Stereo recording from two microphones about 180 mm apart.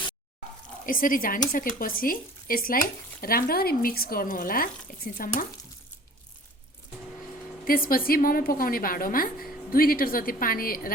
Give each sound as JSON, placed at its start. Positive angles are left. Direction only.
{"t": 0.9, "sound": "speech", "side_deg": 50}
{"t": 7.7, "sound": "speech", "side_deg": 55}